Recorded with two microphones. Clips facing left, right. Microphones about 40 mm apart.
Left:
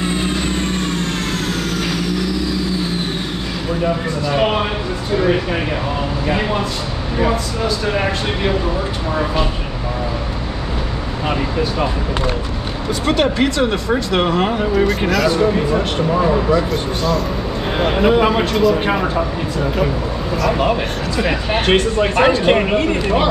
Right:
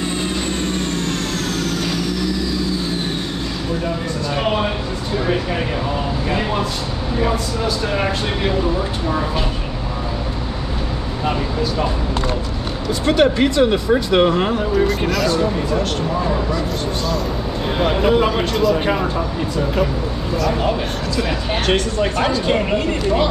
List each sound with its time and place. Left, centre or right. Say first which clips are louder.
3.8 s speech: left 4 dB; centre
6.2 s speech: left 3 dB; centre
7.9 s speech: left 1 dB; centre
13.0 s speech: right 1 dB; centre
14.5 s speech: left 1 dB; left
14.9 s speech: left 2 dB; centre
15.2 s speech: left 3 dB; centre
17.9 s speech: left 3 dB; centre
18.4 s speech: left 2 dB; centre
18.8 s speech: left 2 dB; centre
21.2 s speech: left 4 dB; left
22.1 s speech: left 7 dB; left